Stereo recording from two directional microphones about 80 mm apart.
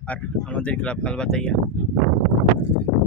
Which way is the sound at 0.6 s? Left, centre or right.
Centre.